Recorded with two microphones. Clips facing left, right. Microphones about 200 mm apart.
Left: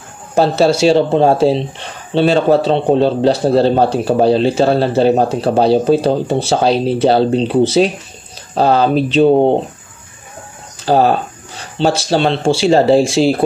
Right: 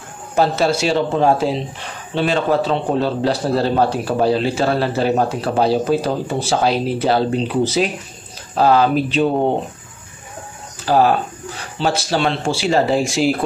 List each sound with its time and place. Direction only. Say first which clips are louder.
0.4 s speech: left 5 dB; 30° left (ahead or behind)
8.5 s speech: left 2 dB; 30° left (ahead or behind)
10.9 s speech: left 3 dB; 30° left (ahead or behind)